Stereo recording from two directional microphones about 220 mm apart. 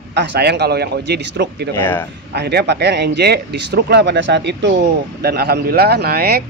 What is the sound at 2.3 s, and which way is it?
Speech, 50° right (ahead or behind).